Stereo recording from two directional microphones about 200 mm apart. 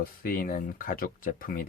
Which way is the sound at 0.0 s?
45° left (ahead or behind).